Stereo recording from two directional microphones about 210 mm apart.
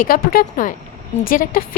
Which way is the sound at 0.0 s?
45° left (ahead or behind).